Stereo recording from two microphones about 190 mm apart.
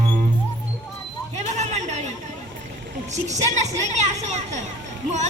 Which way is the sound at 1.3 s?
35° right (ahead or behind).